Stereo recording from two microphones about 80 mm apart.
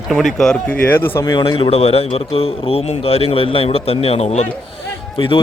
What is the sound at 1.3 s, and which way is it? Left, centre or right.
Speech, left.